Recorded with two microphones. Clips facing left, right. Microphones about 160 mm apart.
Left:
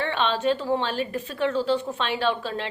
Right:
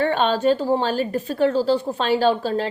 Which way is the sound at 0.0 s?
40° right (ahead or behind).